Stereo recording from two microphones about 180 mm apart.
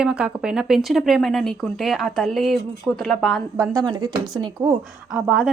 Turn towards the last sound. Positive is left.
turn(degrees=-5)  # may be behind; listen again after turning